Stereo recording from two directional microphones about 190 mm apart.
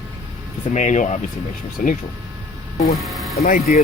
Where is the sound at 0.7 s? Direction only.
40° left (ahead or behind).